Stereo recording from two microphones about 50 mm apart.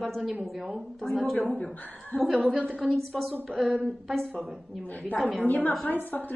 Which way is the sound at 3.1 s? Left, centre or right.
Centre.